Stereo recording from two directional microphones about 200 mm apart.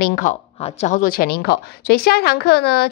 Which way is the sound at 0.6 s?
35° left (ahead or behind).